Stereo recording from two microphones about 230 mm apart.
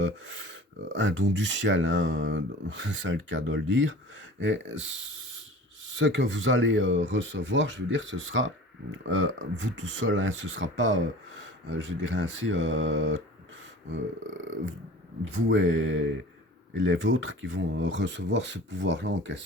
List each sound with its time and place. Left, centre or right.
0.0 s speech: right